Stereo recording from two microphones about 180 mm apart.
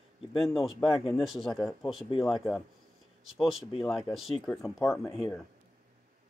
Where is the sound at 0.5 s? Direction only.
Centre (ahead or behind).